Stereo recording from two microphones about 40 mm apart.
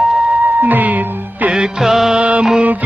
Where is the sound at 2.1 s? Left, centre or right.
Right.